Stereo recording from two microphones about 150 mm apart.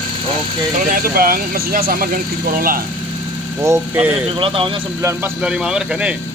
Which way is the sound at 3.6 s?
20° right (ahead or behind).